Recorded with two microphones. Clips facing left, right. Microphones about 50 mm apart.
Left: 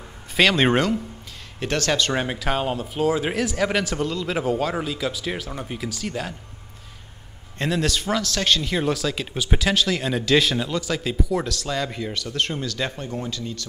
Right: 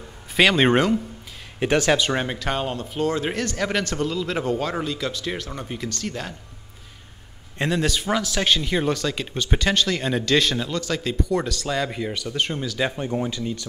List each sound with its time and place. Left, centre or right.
0.4 s a man's voice: centre
1.6 s speech: centre
2.1 s a man's voice: centre
7.5 s a man's voice: centre